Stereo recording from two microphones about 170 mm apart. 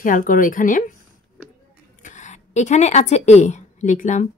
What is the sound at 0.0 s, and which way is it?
Speech, 55° left (ahead or behind).